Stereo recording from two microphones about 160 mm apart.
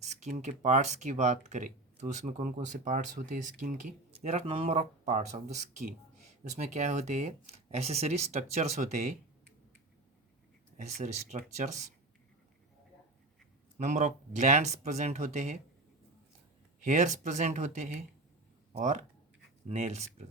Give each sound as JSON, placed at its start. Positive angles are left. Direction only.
{"t": 0.0, "sound": "speech", "side_deg": -45}
{"t": 10.8, "sound": "speech", "side_deg": -45}
{"t": 13.7, "sound": "speech", "side_deg": -50}
{"t": 16.8, "sound": "speech", "side_deg": -50}